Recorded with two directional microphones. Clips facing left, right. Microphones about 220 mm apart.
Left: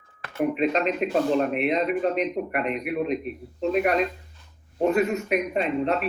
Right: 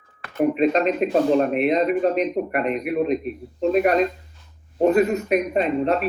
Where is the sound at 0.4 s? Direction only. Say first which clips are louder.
Right 4 dB; 40° right (ahead or behind).